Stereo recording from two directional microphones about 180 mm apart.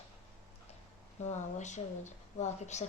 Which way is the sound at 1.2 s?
40° left (ahead or behind).